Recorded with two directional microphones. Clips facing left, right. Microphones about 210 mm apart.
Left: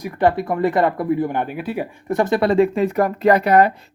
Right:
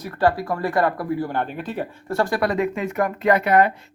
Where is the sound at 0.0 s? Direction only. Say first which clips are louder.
Left 3 dB; 20° left (ahead or behind).